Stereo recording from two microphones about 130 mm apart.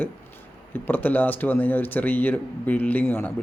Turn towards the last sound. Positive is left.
turn(degrees=15)  # may be behind; listen again after turning